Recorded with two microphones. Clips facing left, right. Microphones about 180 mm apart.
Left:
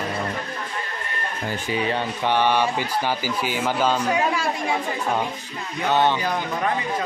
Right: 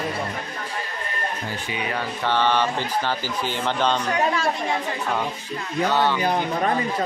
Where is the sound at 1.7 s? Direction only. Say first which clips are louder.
Left 5 dB; 30° left (ahead or behind).